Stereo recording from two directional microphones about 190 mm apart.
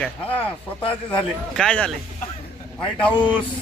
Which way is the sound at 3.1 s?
25° left (ahead or behind).